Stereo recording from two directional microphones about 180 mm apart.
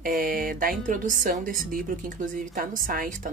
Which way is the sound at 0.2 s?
50° right (ahead or behind).